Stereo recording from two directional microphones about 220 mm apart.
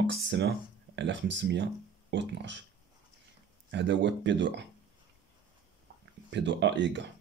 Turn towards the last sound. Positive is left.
turn(degrees=-55)  # may be behind; listen again after turning